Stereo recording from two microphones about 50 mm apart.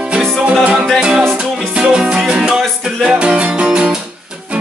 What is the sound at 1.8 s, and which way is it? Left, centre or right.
Music, centre.